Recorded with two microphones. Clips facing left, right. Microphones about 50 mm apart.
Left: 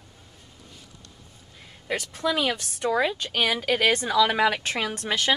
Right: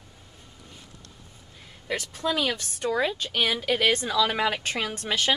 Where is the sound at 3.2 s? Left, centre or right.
Left.